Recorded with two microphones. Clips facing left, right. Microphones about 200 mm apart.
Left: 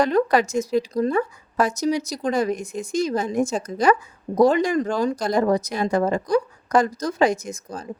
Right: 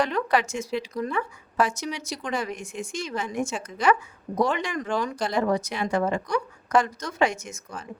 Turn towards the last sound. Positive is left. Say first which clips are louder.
# left 6 dB
turn(degrees=35)  # may be behind; listen again after turning